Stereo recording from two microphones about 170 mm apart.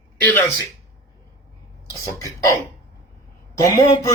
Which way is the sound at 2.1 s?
20° left (ahead or behind).